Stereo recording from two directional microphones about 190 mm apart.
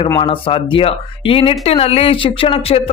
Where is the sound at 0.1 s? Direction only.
25° left (ahead or behind).